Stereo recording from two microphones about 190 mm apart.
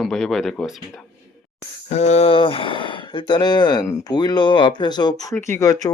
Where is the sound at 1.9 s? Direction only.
35° left (ahead or behind).